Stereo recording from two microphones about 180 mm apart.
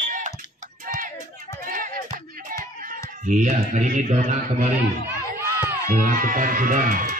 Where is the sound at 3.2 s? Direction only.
45° right (ahead or behind).